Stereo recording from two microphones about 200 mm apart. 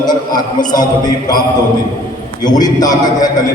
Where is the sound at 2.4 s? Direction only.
20° left (ahead or behind).